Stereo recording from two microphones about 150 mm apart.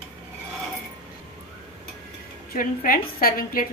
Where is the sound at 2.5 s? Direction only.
65° left (ahead or behind).